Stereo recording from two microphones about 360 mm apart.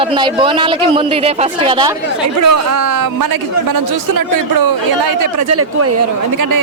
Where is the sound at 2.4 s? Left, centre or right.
Right.